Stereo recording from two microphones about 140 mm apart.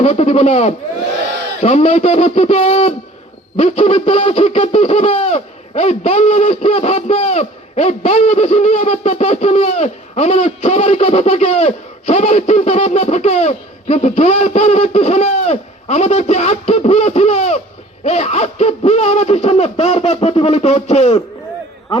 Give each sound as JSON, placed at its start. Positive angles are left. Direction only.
{"t": 0.0, "sound": "owl", "side_deg": 50}